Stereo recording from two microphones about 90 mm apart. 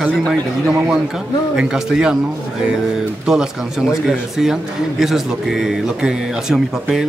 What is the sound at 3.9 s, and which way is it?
Speech, 5° right (ahead or behind).